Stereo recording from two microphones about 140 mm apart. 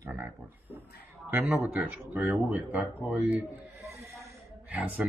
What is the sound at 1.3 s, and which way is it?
Speech, 15° right (ahead or behind).